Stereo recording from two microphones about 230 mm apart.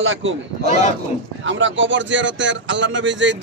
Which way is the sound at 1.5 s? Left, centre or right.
Right.